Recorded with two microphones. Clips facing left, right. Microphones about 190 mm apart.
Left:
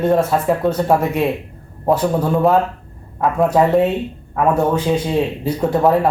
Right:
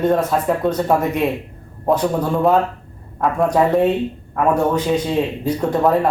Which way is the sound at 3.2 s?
Centre (ahead or behind).